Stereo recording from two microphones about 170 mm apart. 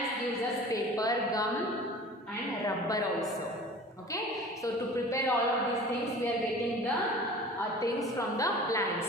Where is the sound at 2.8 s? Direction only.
20° left (ahead or behind).